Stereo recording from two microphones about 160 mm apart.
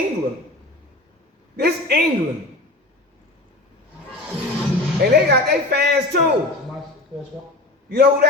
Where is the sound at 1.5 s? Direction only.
85° right.